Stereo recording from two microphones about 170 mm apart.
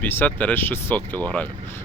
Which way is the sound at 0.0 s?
10° left (ahead or behind).